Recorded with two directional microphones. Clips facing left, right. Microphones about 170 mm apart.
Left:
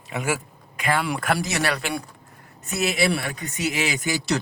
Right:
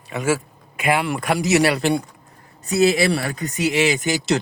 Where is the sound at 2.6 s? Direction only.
35° right (ahead or behind).